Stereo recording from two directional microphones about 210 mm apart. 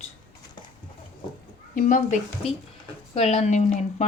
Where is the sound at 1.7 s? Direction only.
40° left (ahead or behind).